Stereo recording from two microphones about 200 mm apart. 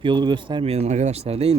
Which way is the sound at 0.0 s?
20° right (ahead or behind).